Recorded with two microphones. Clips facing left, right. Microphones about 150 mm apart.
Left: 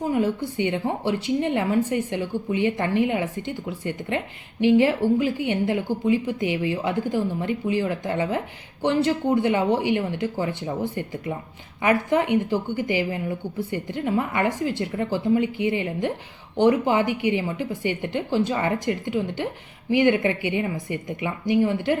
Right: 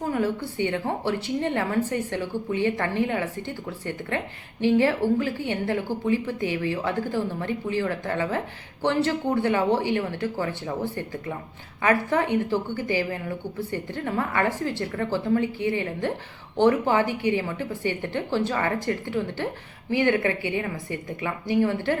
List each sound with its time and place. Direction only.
0.0 s a woman's voice: 15° left (ahead or behind)